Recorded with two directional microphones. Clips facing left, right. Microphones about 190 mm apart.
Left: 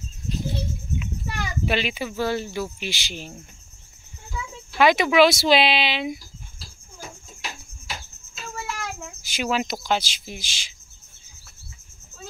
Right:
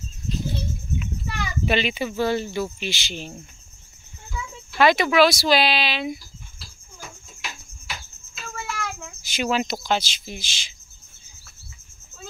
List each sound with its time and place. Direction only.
1.7 s speech: 5° left (ahead or behind)
4.4 s speech: 15° left (ahead or behind)
7.0 s cricket: 35° left (ahead or behind)
8.4 s child singing: 20° left (ahead or behind)
9.4 s speech: 10° left (ahead or behind)